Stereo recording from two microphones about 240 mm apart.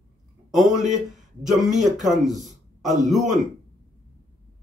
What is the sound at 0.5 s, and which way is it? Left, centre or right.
Speech, right.